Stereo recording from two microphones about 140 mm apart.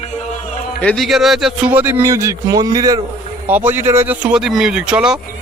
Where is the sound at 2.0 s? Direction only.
20° right (ahead or behind).